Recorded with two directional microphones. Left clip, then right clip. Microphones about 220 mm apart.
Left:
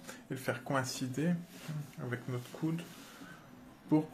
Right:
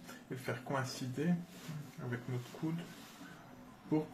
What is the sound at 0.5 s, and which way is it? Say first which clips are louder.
Speech: left 4 dB; 45° left (ahead or behind).